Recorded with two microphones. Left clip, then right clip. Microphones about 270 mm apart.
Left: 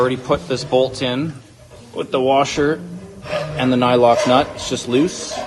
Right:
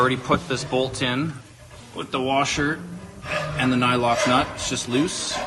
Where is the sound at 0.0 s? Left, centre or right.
Centre.